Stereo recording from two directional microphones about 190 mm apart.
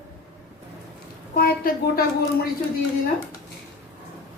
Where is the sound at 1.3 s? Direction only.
50° left (ahead or behind).